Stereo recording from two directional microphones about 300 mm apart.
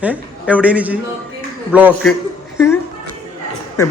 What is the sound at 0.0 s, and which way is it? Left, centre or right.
A man's voice, centre.